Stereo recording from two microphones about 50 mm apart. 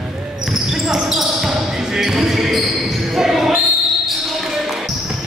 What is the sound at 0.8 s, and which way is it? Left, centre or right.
Speech, centre.